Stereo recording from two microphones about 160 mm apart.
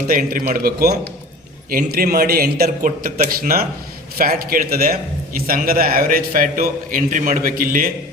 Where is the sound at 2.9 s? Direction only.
55° right (ahead or behind); by 5.0 s 75° right (ahead or behind).